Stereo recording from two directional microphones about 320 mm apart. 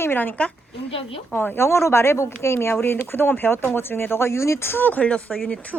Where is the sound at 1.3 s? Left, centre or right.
Centre.